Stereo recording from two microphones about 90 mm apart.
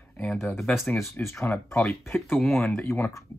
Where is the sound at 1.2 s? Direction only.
25° left (ahead or behind).